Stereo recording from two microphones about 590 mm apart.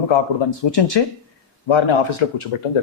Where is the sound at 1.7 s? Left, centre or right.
Left.